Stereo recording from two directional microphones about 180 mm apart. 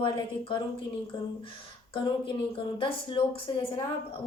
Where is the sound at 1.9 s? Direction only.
30° left (ahead or behind).